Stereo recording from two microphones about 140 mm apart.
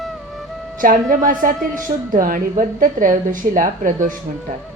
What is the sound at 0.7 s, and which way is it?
A woman's voice, 75° right (ahead or behind).